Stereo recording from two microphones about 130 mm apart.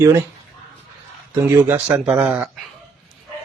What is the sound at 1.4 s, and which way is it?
Speech, 15° right (ahead or behind).